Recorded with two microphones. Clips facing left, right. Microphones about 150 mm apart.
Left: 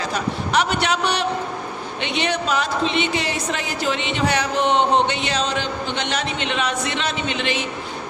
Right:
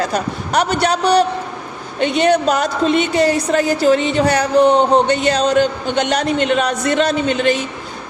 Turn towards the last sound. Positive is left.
turn(degrees=-45)  # may be behind; listen again after turning